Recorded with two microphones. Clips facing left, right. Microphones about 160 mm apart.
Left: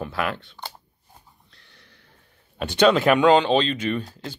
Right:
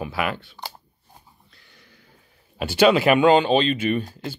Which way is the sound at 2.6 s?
5° right (ahead or behind).